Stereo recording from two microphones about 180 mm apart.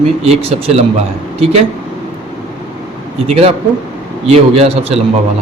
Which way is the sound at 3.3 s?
35° right (ahead or behind).